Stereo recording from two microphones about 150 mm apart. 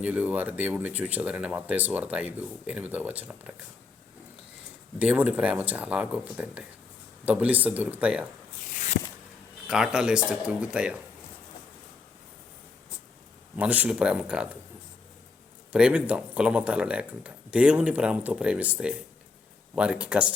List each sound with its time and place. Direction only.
0.0 s speech: 10° right (ahead or behind)
4.9 s speech: 10° right (ahead or behind)
8.7 s a sound: 55° left (ahead or behind)
9.6 s speech: 5° right (ahead or behind)
13.6 s speech: 10° right (ahead or behind)
15.7 s speech: 5° right (ahead or behind)